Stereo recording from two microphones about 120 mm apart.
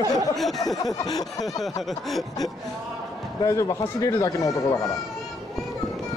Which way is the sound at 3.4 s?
25° left (ahead or behind).